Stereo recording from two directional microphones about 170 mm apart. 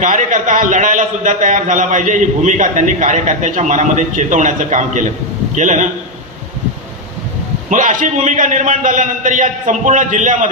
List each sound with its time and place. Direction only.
0.0 s a man's voice: 50° right (ahead or behind)
7.7 s a man's voice: 50° right (ahead or behind)